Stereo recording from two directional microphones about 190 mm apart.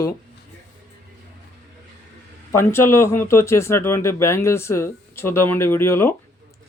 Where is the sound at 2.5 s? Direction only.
15° left (ahead or behind).